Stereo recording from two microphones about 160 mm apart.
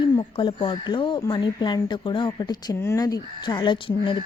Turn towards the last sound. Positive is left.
turn(degrees=30)  # may be behind; listen again after turning